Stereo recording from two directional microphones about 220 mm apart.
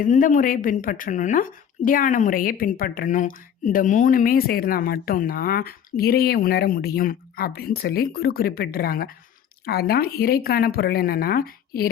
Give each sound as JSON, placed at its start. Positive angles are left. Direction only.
{"t": 0.0, "sound": "a woman's voice", "side_deg": 35}